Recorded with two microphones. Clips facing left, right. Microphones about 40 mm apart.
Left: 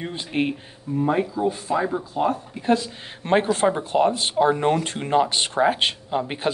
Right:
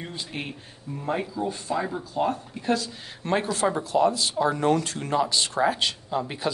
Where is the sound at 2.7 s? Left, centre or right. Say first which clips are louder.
Left 5 dB; left.